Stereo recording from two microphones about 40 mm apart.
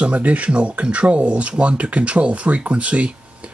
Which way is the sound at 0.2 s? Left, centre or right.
Right.